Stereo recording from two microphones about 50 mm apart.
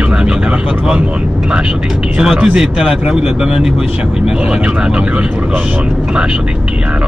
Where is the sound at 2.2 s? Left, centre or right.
Centre.